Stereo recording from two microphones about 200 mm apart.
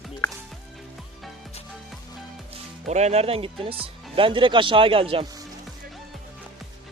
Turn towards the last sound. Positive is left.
turn(degrees=-25)  # may be behind; listen again after turning